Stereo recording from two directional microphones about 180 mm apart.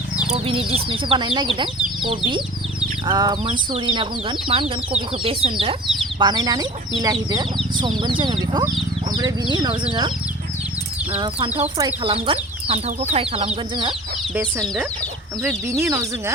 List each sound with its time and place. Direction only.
0.3 s speech: 30° right (ahead or behind)
11.8 s speech: 30° right (ahead or behind)
15.8 s speech: 15° right (ahead or behind)